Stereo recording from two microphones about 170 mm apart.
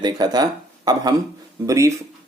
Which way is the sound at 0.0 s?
25° right (ahead or behind).